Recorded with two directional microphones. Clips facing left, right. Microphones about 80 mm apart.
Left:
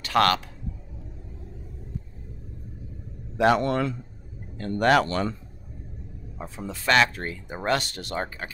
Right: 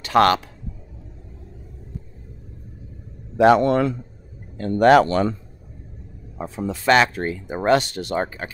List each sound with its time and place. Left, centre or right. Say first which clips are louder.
0.0 s speech: right 5 dB; right
3.3 s speech: right 6 dB; right
6.7 s speech: right 4 dB; right